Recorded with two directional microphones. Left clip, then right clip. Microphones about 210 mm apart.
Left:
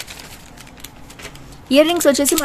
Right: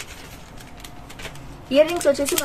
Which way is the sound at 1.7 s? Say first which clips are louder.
Left 4 dB; 55° left (ahead or behind).